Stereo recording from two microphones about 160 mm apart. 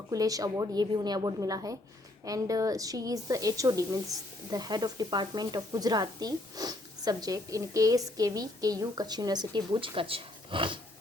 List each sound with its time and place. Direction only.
0.1 s speech: 20° right (ahead or behind)